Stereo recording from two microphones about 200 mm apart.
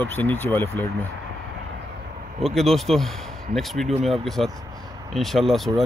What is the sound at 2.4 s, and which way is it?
Speech, centre (ahead or behind).